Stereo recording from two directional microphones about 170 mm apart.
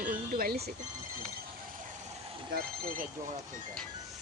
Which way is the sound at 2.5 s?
60° right (ahead or behind).